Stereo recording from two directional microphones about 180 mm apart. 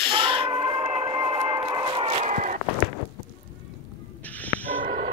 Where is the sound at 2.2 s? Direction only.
45° right (ahead or behind).